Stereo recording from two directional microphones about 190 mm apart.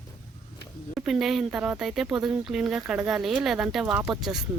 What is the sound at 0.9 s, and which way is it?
Speech, centre (ahead or behind).